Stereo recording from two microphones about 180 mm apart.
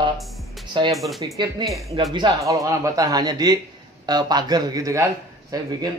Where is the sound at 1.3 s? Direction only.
25° right (ahead or behind).